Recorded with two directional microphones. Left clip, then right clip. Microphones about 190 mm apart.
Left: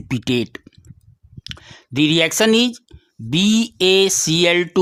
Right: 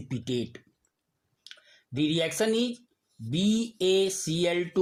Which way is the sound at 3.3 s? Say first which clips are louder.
Left 11 dB; 35° left (ahead or behind).